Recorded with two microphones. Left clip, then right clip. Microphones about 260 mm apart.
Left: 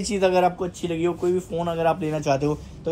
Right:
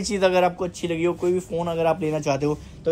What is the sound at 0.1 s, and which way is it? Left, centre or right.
Speech, centre.